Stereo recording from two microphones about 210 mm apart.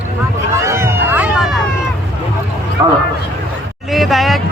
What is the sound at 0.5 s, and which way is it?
Run, 15° right (ahead or behind).